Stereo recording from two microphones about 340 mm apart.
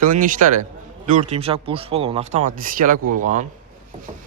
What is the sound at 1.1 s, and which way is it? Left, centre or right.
Speech, centre.